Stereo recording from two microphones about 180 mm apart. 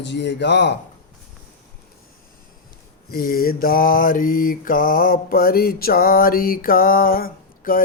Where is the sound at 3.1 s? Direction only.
55° left (ahead or behind).